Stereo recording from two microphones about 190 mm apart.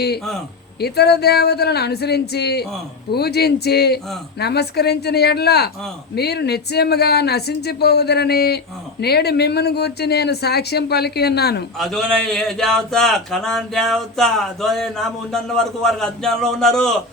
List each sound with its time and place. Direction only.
0.8 s speech: 60° left (ahead or behind)
11.8 s speech: centre (ahead or behind)